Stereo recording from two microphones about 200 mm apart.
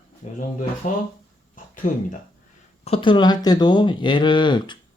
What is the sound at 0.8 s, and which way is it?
Speech, 40° left (ahead or behind).